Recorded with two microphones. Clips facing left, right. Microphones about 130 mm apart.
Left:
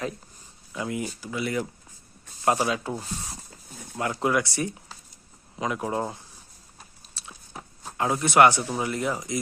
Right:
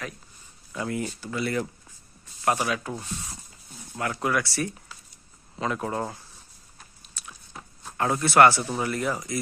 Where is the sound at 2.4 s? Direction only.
25° left (ahead or behind).